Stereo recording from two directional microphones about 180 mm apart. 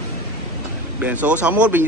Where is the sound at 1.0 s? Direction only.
10° right (ahead or behind).